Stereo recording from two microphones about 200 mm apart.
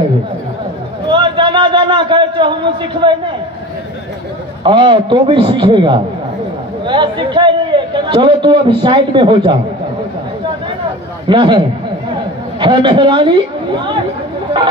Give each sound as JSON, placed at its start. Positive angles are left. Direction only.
{"t": 1.0, "sound": "a sound", "side_deg": -25}
{"t": 4.6, "sound": "a man's voice", "side_deg": -25}
{"t": 11.2, "sound": "a man's voice", "side_deg": -25}